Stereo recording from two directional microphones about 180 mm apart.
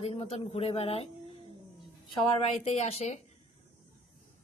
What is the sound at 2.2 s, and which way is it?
Speech, 30° left (ahead or behind).